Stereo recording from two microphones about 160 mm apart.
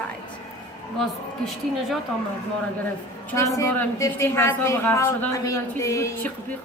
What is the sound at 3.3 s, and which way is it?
A woman's voice, 20° left (ahead or behind).